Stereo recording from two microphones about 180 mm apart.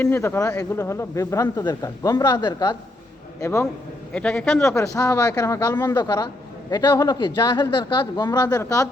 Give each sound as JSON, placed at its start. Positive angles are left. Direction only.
{"t": 0.0, "sound": "speech", "side_deg": 15}
{"t": 4.1, "sound": "speech", "side_deg": 5}